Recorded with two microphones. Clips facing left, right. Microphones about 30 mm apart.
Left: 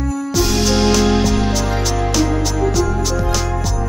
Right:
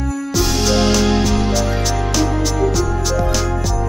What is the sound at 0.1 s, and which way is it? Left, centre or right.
Music, centre.